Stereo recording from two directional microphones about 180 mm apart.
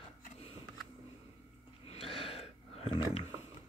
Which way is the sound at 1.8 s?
30° left (ahead or behind).